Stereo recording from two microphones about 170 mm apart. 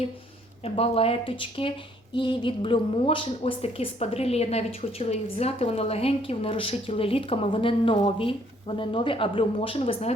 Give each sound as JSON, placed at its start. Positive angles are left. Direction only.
{"t": 0.6, "sound": "speech", "side_deg": 35}